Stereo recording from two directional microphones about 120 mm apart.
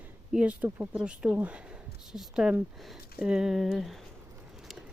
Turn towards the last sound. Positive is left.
turn(degrees=0)  # may be behind; listen again after turning